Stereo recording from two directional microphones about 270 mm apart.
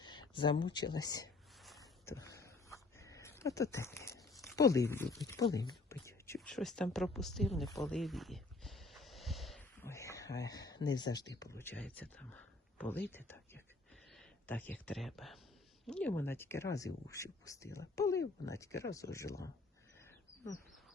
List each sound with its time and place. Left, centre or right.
0.0 s speech: centre
1.8 s a sound: centre
4.5 s speech: centre
7.7 s speech: centre
7.9 s a sound: centre
13.1 s speech: centre